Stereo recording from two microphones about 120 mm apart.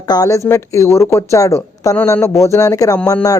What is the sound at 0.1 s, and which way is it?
Speech, 30° left (ahead or behind).